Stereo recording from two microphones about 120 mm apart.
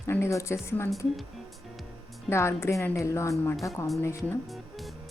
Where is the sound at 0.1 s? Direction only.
25° left (ahead or behind).